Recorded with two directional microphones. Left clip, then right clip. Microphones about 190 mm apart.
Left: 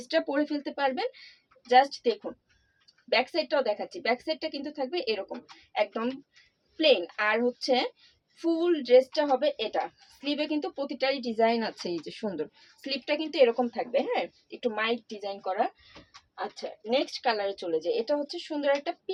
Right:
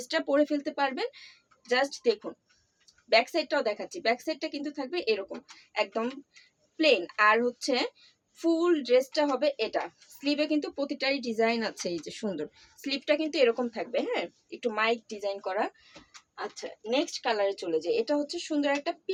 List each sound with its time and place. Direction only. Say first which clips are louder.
0.0 s speech: right 1 dB; 30° right (ahead or behind)
7.2 s speech: right 3 dB; 20° right (ahead or behind)